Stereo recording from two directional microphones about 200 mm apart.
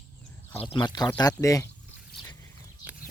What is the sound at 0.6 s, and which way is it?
Speech, 25° left (ahead or behind).